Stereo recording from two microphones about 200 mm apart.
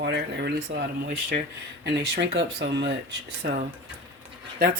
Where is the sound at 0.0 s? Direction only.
60° right (ahead or behind).